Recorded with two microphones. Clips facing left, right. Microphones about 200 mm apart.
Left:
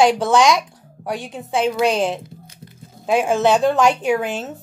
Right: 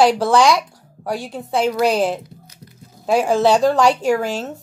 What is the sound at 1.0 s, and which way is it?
Speech, centre (ahead or behind).